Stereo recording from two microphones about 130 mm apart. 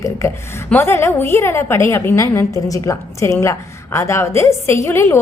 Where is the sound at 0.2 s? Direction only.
20° left (ahead or behind).